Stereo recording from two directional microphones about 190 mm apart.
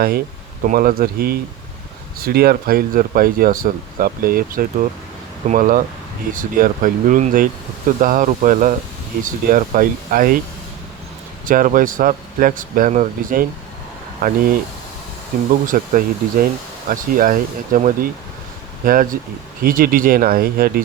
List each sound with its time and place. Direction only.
0.6 s speech: 45° right (ahead or behind)
11.4 s speech: 45° right (ahead or behind)
15.6 s speech: 45° right (ahead or behind)